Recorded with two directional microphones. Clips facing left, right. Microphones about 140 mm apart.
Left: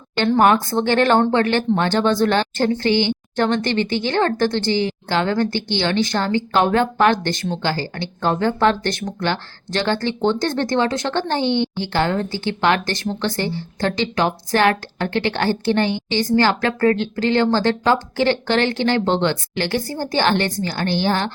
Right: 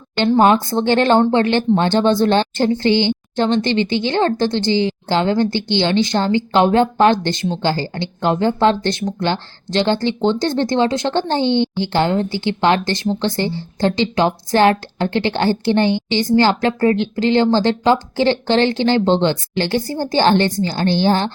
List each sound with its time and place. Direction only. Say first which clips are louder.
0.3 s a woman's voice: right 2 dB; 25° right (ahead or behind)